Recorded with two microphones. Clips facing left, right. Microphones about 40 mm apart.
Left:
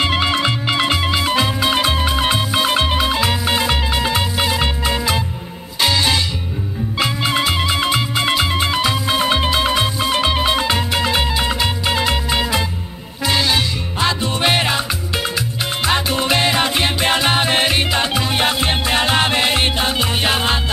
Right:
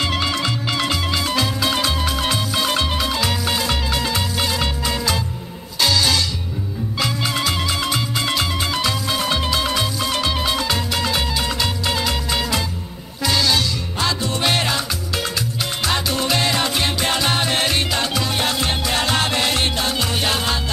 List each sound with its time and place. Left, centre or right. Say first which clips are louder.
0.0 s music: left 4 dB; left